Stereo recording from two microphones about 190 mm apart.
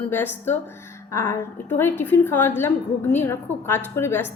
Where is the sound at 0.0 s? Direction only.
10° left (ahead or behind).